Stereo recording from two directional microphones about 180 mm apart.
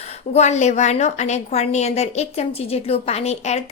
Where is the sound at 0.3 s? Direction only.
40° left (ahead or behind).